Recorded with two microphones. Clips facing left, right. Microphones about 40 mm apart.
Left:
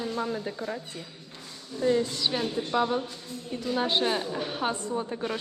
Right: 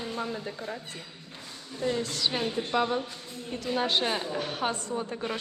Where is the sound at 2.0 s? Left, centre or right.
Centre.